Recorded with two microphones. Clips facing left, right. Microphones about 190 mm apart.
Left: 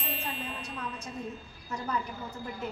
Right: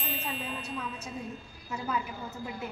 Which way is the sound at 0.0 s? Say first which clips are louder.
Right 1 dB; centre (ahead or behind).